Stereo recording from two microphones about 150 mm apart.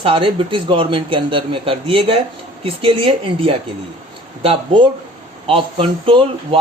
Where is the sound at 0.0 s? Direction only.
35° right (ahead or behind).